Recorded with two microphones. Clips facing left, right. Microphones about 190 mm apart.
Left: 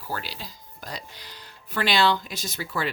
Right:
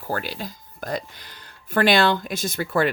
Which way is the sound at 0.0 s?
50° right (ahead or behind).